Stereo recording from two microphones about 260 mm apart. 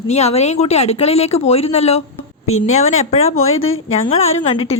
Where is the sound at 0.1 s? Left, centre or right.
Left.